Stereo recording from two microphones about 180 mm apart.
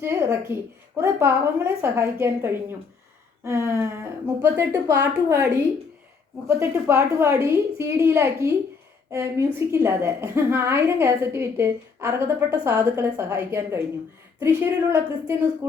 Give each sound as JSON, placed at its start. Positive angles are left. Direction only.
{"t": 0.0, "sound": "a woman's voice", "side_deg": -15}
{"t": 6.6, "sound": "a woman's voice", "side_deg": -15}